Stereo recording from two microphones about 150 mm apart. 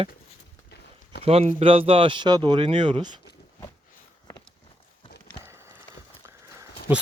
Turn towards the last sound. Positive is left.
turn(degrees=-15)  # may be behind; listen again after turning